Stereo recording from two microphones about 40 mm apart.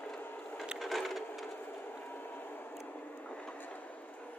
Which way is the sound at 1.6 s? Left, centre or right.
Left.